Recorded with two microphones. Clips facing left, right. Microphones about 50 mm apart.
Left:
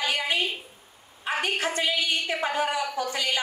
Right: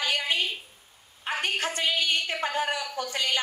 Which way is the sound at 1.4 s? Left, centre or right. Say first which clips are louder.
Left 2 dB; left.